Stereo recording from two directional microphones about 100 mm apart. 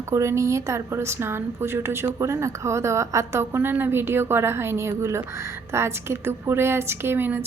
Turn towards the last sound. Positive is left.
turn(degrees=-20)  # may be behind; listen again after turning